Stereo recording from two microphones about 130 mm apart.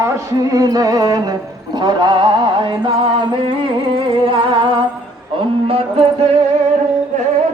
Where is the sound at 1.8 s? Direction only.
35° right (ahead or behind).